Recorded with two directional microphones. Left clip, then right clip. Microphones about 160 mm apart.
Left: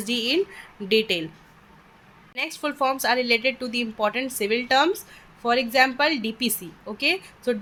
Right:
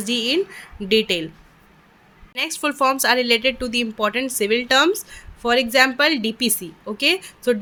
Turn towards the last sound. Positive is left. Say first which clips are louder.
# right 5 dB
turn(degrees=-40)  # may be behind; listen again after turning